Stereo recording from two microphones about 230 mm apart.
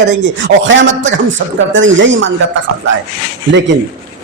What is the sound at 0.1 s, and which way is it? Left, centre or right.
A man's voice, right.